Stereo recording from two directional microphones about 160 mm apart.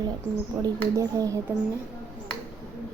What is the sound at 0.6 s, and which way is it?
Speech, 20° right (ahead or behind).